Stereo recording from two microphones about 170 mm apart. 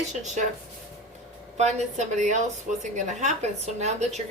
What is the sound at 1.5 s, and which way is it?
A woman's voice, 45° right (ahead or behind).